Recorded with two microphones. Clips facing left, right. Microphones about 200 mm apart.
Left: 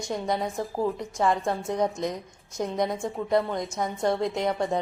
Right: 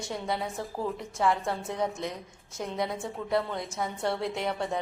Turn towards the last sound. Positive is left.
turn(degrees=15)  # may be behind; listen again after turning